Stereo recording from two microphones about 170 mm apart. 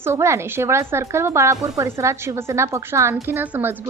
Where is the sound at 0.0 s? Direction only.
15° right (ahead or behind).